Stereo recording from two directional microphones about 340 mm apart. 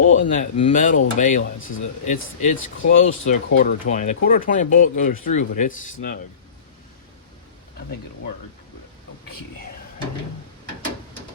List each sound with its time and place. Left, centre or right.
0.0 s speech: left